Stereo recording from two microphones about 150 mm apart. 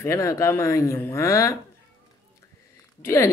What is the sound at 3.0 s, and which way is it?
Speech, 20° left (ahead or behind).